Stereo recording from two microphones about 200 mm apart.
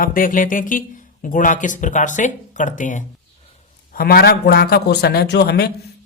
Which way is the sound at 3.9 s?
50° left (ahead or behind).